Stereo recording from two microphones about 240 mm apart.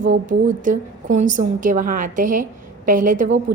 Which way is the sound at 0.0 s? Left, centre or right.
Right.